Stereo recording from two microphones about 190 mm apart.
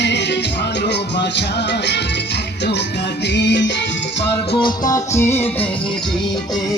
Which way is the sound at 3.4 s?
65° left (ahead or behind).